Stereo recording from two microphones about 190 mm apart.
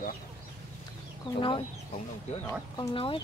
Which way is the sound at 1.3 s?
25° left (ahead or behind).